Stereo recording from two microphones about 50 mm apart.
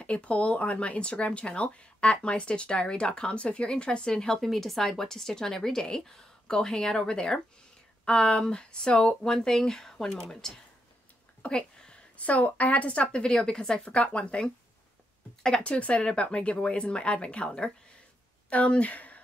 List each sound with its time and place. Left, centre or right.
0.0 s speech: left
4.4 s speech: centre; by 17.5 s left
18.5 s speech: left